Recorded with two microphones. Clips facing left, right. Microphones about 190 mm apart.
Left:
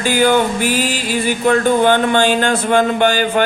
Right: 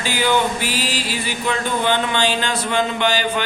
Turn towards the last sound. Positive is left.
turn(degrees=50)  # may be behind; listen again after turning